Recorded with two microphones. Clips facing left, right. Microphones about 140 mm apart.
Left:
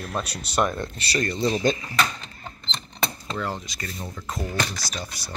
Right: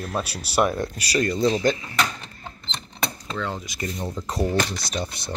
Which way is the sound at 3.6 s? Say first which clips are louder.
Right 6 dB; 20° right (ahead or behind).